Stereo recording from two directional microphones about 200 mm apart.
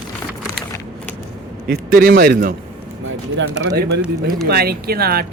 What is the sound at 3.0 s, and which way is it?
Speech, 65° right (ahead or behind).